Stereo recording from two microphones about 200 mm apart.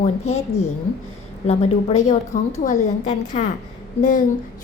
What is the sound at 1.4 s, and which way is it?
A woman's voice, 35° left (ahead or behind).